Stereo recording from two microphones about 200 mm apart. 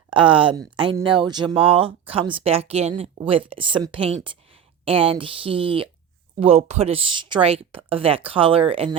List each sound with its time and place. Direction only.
0.1 s speech: 25° right (ahead or behind)